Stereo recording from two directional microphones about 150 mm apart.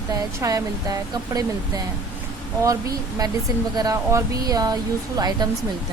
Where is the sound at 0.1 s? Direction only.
25° right (ahead or behind).